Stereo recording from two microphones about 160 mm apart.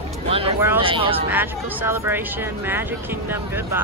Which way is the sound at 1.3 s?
10° right (ahead or behind).